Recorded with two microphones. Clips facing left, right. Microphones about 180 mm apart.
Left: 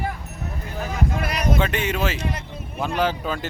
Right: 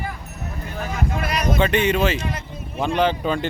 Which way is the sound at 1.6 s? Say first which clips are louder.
Right 5 dB; 5° left (ahead or behind).